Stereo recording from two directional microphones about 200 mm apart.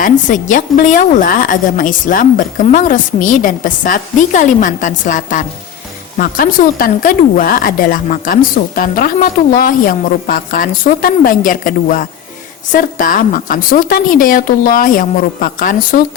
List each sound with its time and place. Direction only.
0.0 s a woman's voice: 40° left (ahead or behind)